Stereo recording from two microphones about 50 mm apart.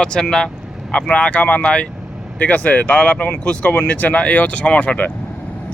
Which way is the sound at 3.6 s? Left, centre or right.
Left.